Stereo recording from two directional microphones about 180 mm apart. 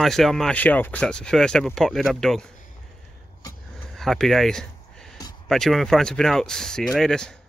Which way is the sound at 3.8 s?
Centre (ahead or behind).